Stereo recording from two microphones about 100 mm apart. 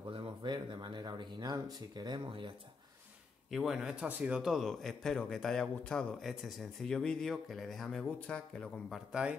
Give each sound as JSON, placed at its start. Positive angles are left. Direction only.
{"t": 0.1, "sound": "speech", "side_deg": -60}
{"t": 3.4, "sound": "a man's voice", "side_deg": 0}